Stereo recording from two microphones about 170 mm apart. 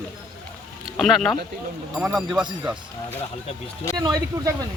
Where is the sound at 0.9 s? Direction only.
Centre (ahead or behind).